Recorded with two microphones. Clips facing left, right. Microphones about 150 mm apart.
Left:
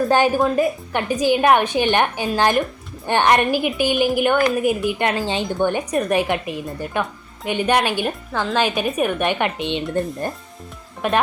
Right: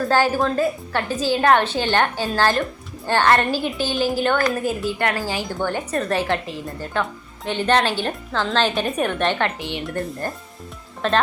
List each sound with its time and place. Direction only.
0.1 s speech: 20° left (ahead or behind)